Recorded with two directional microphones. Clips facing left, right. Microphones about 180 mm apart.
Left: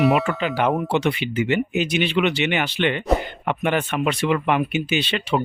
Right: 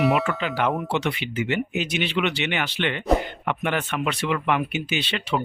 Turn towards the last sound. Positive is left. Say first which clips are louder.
# left 4 dB
turn(degrees=15)  # may be behind; listen again after turning